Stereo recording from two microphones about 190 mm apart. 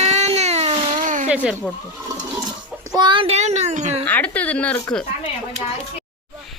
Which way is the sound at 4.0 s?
10° left (ahead or behind).